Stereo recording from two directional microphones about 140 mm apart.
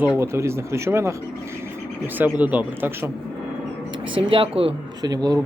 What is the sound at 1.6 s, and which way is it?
Bird, 15° right (ahead or behind).